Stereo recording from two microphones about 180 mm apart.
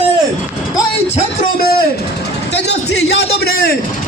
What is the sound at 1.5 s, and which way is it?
Speech, 55° left (ahead or behind).